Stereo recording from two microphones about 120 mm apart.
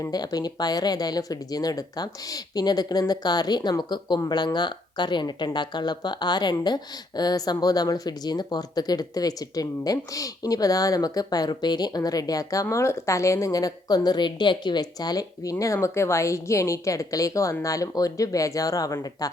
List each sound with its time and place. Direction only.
0.0 s a woman's voice: 35° left (ahead or behind)